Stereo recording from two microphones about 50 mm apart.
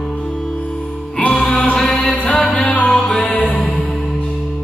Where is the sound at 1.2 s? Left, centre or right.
Centre.